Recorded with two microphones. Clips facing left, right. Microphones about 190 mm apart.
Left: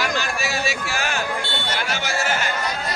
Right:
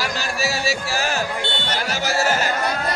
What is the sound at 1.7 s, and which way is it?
Music, 35° right (ahead or behind).